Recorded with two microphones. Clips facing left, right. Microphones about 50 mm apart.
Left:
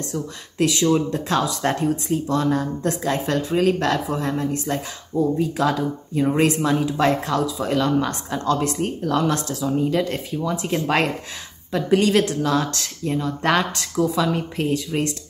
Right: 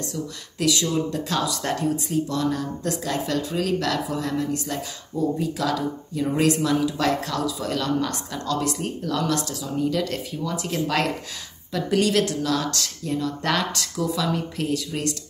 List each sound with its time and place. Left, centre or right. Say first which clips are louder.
0.0 s speech: left 2 dB; left